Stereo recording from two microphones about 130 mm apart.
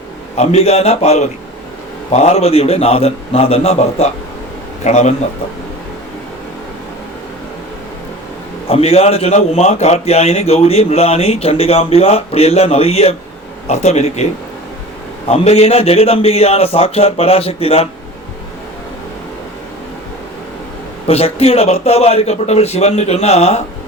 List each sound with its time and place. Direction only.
0.3 s a man's voice: 55° left (ahead or behind)
8.6 s a man's voice: 50° left (ahead or behind)
15.3 s a man's voice: 50° left (ahead or behind)
21.1 s a man's voice: 50° left (ahead or behind)